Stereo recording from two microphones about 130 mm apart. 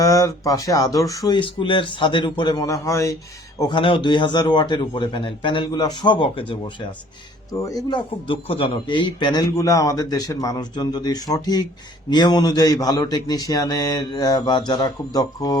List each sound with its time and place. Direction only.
0.0 s speech: 25° left (ahead or behind)
3.6 s a man's voice: 35° left (ahead or behind)
7.5 s speech: 25° left (ahead or behind)
7.9 s a man's voice: 40° left (ahead or behind)